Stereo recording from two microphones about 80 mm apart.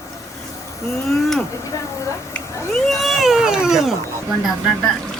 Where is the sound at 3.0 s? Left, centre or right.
Centre.